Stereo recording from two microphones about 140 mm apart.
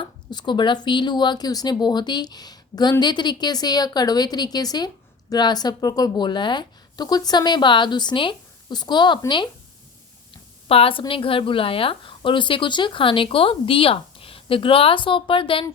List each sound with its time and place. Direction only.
0.0 s a woman's voice: 30° left (ahead or behind)
10.7 s speech: 40° left (ahead or behind)